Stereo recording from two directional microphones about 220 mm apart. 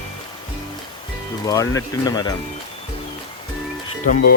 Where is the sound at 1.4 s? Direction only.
15° left (ahead or behind).